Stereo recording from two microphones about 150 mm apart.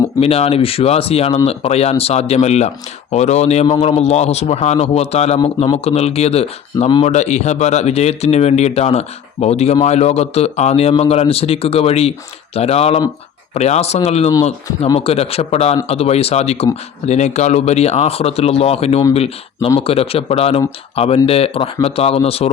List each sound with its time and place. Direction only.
0.2 s speech: 40° left (ahead or behind)